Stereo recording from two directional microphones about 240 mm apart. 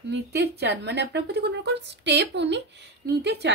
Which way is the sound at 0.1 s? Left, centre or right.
Right.